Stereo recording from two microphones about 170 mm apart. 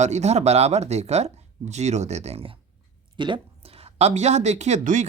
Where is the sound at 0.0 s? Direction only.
40° right (ahead or behind).